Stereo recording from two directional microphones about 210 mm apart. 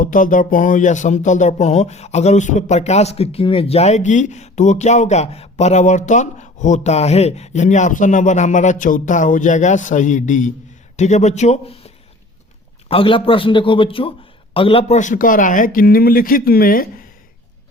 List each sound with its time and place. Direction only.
0.0 s speech: 40° left (ahead or behind)
12.9 s a man's voice: 25° left (ahead or behind); by 16.9 s 45° left (ahead or behind)